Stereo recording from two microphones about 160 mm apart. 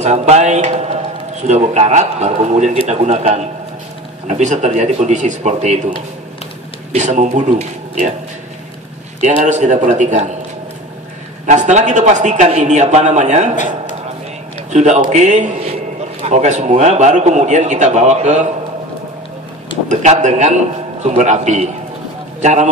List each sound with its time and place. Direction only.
0.0 s a man's voice: 45° right (ahead or behind)
9.2 s a man's voice: 45° right (ahead or behind)
11.4 s a man's voice: 45° right (ahead or behind)
14.7 s a man's voice: 45° right (ahead or behind)
19.9 s a man's voice: 50° right (ahead or behind)